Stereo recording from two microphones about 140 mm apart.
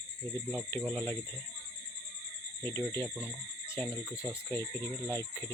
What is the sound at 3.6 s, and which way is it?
Cricket, 15° left (ahead or behind).